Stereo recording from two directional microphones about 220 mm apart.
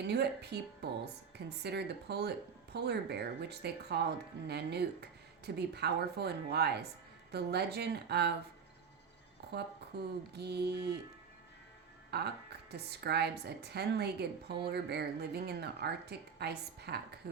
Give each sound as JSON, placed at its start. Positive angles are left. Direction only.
{"t": 0.1, "sound": "a woman's voice", "side_deg": -50}
{"t": 10.3, "sound": "a woman's voice", "side_deg": -50}
{"t": 12.1, "sound": "a woman's voice", "side_deg": -50}